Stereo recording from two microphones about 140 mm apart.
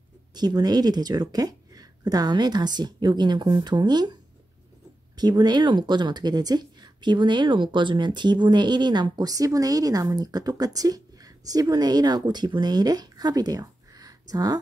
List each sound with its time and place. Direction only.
0.3 s speech: 30° right (ahead or behind)